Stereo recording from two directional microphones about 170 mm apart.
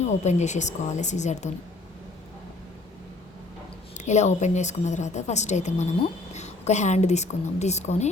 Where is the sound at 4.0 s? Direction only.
45° left (ahead or behind).